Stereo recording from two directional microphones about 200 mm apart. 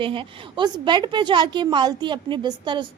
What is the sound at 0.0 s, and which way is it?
A woman's voice, 25° right (ahead or behind).